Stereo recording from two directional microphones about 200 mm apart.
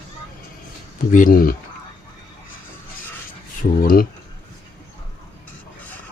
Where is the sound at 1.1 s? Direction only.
45° left (ahead or behind).